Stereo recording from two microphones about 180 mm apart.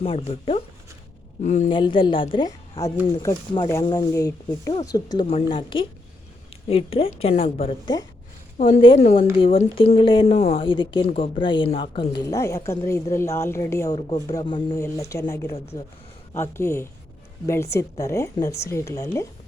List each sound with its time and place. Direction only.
0.0 s a woman's voice: 35° left (ahead or behind)
1.7 s a woman's voice: 25° left (ahead or behind)
8.5 s a woman's voice: 45° left (ahead or behind)
9.4 s a woman's voice: 30° left (ahead or behind)
14.8 s speech: 15° left (ahead or behind)
16.3 s speech: 15° left (ahead or behind)